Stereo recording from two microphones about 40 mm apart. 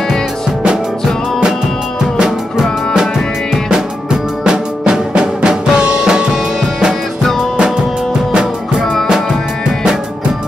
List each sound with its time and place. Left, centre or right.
2.1 s music: centre
2.6 s music: centre
4.5 s music: centre
8.3 s music: right